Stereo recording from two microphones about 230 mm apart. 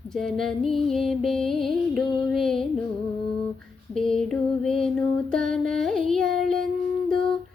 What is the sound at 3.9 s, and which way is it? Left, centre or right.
Music, centre.